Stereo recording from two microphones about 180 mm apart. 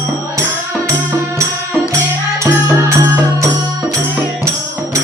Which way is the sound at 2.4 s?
15° right (ahead or behind).